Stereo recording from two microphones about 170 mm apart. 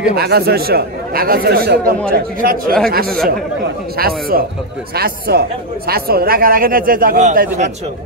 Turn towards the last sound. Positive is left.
turn(degrees=-50)  # may be behind; listen again after turning